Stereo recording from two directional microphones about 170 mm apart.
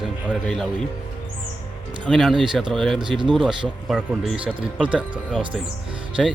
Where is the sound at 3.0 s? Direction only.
25° right (ahead or behind).